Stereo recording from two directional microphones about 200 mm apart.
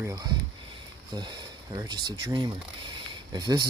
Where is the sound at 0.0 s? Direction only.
15° right (ahead or behind).